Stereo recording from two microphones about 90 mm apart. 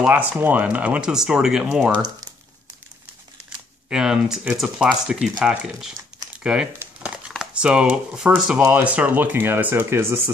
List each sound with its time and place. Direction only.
0.0 s speech: 20° right (ahead or behind)
3.9 s speech: 10° right (ahead or behind)
8.5 s speech: 15° right (ahead or behind)